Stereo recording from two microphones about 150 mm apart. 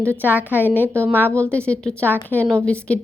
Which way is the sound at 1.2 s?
10° left (ahead or behind).